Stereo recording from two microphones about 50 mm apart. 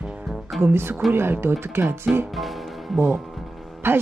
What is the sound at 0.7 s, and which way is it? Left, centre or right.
Music, right.